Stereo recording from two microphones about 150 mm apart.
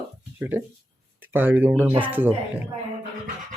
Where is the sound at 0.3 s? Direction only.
10° right (ahead or behind).